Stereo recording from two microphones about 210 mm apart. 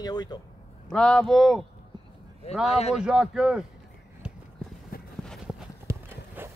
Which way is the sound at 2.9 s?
5° right (ahead or behind).